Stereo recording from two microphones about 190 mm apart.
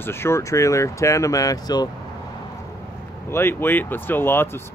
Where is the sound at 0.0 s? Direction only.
10° left (ahead or behind).